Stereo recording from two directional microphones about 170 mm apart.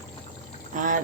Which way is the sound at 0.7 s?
50° right (ahead or behind).